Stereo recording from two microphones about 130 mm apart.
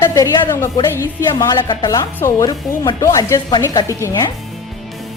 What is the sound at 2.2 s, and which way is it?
Speech, 15° left (ahead or behind).